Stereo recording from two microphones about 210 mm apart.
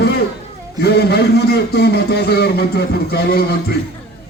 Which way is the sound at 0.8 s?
50° left (ahead or behind).